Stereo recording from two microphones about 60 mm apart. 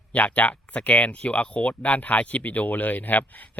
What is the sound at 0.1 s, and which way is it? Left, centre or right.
Speech, left.